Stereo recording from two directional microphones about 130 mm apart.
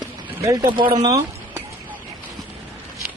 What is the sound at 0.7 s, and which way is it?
Speech, 40° right (ahead or behind).